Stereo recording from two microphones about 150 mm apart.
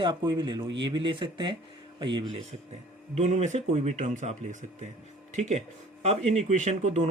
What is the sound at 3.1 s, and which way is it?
Speech, 50° right (ahead or behind).